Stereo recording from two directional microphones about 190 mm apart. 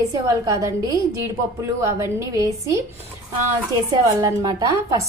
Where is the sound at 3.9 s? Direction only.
20° right (ahead or behind).